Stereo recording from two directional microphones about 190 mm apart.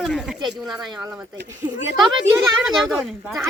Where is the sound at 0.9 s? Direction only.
20° right (ahead or behind).